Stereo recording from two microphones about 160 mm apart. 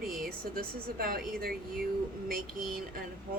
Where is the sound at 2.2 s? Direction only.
65° right (ahead or behind).